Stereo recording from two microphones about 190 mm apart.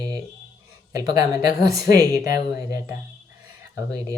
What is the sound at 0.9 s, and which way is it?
Speech, 20° right (ahead or behind).